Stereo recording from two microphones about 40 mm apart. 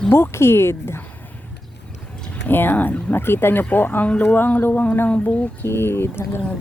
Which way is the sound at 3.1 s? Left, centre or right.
Left.